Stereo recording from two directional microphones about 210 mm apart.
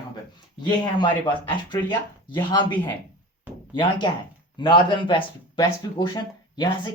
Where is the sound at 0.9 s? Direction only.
20° left (ahead or behind).